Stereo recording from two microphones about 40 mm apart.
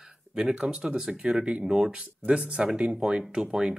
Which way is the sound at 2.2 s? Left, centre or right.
Right.